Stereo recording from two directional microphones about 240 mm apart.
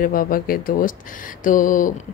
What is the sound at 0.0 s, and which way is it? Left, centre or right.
A woman's voice, left.